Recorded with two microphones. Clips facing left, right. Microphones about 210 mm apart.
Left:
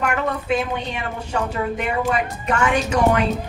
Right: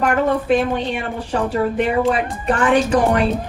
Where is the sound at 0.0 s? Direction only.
40° right (ahead or behind).